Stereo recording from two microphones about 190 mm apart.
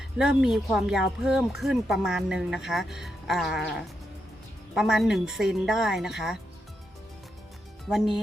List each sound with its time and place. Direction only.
0.2 s speech: centre (ahead or behind)
7.9 s speech: centre (ahead or behind)